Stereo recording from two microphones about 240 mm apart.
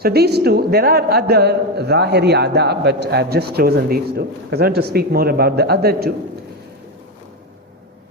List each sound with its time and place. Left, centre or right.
0.0 s a woman's voice: right